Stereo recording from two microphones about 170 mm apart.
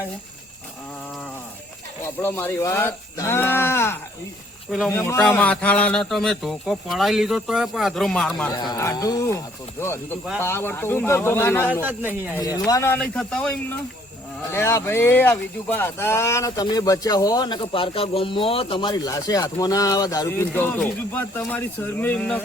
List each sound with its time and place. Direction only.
2.2 s speech: 15° left (ahead or behind)
8.5 s speech: 25° left (ahead or behind)
11.7 s a man's voice: 10° right (ahead or behind)
12.4 s speech: 20° left (ahead or behind)
13.0 s speech: 5° left (ahead or behind)